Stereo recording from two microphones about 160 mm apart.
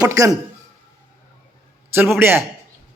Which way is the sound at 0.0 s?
20° right (ahead or behind).